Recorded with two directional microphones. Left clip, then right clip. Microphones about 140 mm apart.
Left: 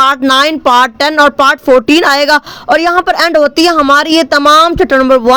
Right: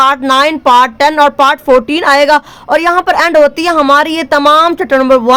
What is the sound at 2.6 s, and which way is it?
Speech, 25° left (ahead or behind).